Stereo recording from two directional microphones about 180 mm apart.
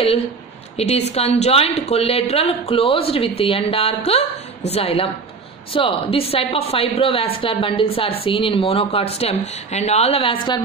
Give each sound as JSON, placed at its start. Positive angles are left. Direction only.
{"t": 0.7, "sound": "a woman's voice", "side_deg": 35}